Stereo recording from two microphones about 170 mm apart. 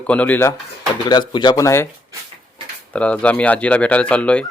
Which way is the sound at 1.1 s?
25° left (ahead or behind).